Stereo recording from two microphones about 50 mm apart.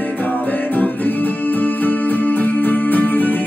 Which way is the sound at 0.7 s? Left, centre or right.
Left.